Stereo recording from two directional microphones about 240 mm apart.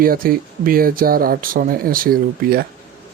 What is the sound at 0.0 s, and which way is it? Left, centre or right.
Speech, right.